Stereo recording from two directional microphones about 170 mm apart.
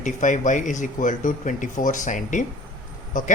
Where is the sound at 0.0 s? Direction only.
45° left (ahead or behind).